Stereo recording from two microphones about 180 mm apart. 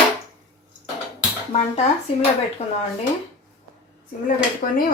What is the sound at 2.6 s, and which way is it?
Speech, 35° left (ahead or behind).